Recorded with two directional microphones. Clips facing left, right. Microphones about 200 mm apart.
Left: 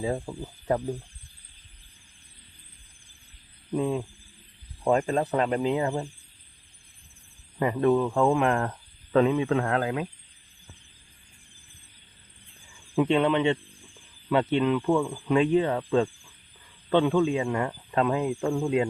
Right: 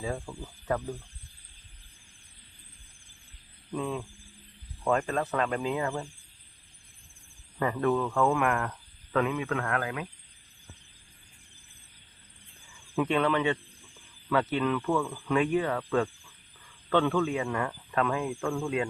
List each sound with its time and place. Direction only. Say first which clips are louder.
0.0 s speech: left 5 dB; 20° left (ahead or behind)
3.7 s speech: left 6 dB; 25° left (ahead or behind)
7.6 s speech: left 4 dB; 20° left (ahead or behind)
13.0 s speech: left 4 dB; 25° left (ahead or behind)